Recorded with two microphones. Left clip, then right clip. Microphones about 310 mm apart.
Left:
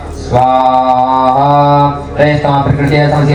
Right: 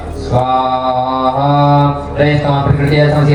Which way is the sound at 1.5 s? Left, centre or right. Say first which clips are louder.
Left 3 dB; left.